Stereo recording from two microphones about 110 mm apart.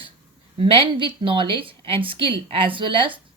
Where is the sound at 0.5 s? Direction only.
55° right (ahead or behind).